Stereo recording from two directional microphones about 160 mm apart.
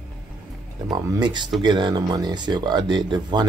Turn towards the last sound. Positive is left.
turn(degrees=-30)  # may be behind; listen again after turning